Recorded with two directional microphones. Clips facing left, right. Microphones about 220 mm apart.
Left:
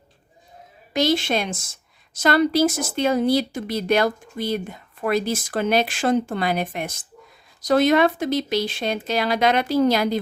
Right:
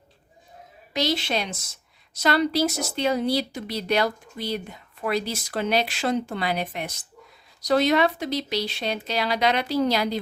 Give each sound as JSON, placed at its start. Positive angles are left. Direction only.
{"t": 0.9, "sound": "a woman's voice", "side_deg": 50}